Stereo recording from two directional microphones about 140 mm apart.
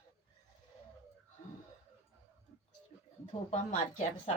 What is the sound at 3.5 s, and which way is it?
Speech, 55° left (ahead or behind).